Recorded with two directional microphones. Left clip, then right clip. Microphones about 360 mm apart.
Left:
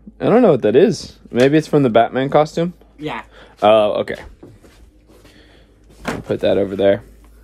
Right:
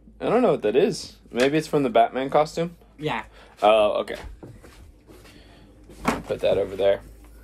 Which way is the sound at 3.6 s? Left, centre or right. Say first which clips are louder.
Left 6 dB; left.